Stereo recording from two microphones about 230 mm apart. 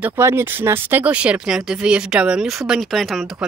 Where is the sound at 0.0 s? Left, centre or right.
Centre.